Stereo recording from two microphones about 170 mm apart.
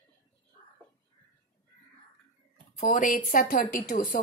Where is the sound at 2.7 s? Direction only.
50° left (ahead or behind).